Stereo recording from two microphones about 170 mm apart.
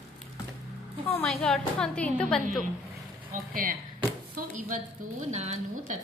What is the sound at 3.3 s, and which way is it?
Speech, 55° right (ahead or behind).